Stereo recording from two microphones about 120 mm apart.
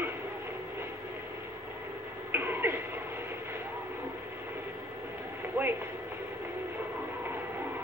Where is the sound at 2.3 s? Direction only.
15° right (ahead or behind).